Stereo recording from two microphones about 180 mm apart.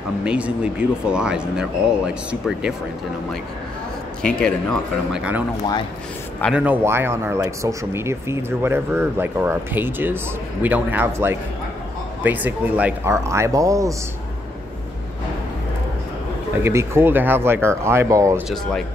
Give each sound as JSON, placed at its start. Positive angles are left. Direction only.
{"t": 0.2, "sound": "speech", "side_deg": -5}
{"t": 4.2, "sound": "speech", "side_deg": 5}
{"t": 6.5, "sound": "speech", "side_deg": -10}
{"t": 16.6, "sound": "speech", "side_deg": -15}
{"t": 18.5, "sound": "speech", "side_deg": 0}